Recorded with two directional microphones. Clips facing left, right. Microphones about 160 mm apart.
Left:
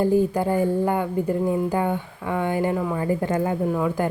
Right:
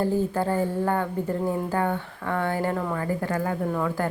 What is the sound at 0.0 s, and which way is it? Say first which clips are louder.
Speech: left 4 dB; 15° left (ahead or behind).